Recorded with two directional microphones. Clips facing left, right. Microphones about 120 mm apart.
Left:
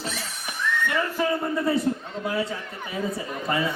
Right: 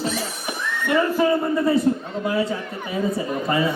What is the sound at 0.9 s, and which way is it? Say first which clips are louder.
A man's voice: right 9 dB; 25° right (ahead or behind).